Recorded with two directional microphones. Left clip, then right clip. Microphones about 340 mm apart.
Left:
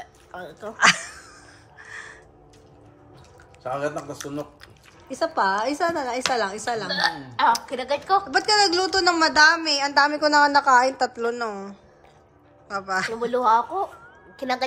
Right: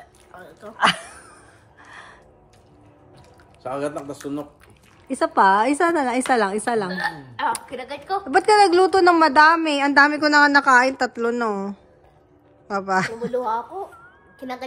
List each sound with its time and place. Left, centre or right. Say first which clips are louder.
0.4 s speech: left 5 dB; centre
0.7 s a sound: left 1 dB; centre
3.6 s a woman's voice: even; right
5.1 s a woman's voice: right 6 dB; right
6.9 s a woman's voice: left 3 dB; centre
8.3 s a woman's voice: right 9 dB; right
13.3 s speech: left 5 dB; left